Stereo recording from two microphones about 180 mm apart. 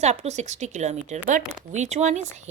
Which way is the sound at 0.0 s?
40° right (ahead or behind).